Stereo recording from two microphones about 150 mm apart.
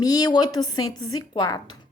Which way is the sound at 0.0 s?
25° left (ahead or behind).